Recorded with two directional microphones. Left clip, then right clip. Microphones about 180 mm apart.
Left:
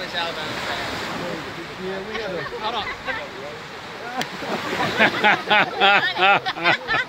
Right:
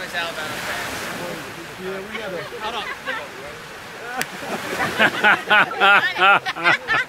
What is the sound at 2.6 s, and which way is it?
Speech, 35° left (ahead or behind).